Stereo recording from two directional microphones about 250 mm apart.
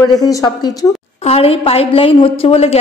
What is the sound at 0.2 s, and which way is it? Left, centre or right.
A woman's voice, centre.